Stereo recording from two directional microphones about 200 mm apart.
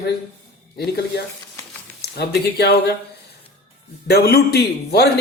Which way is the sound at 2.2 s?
55° left (ahead or behind).